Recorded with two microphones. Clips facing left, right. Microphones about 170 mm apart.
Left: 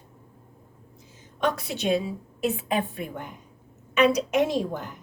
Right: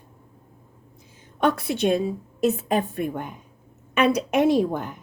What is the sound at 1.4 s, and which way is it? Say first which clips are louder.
A woman's voice: right 5 dB; 55° right (ahead or behind).